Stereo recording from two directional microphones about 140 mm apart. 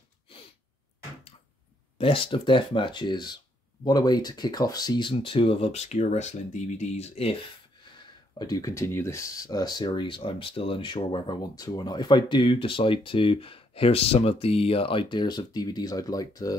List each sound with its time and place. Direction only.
2.0 s speech: 40° left (ahead or behind)
8.4 s speech: 25° left (ahead or behind)